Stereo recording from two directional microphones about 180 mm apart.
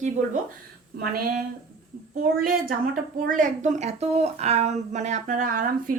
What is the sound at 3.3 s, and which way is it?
A woman's voice, 45° right (ahead or behind).